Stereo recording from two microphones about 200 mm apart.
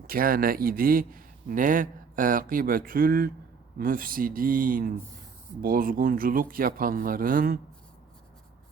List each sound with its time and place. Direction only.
0.1 s a man's voice: 45° right (ahead or behind)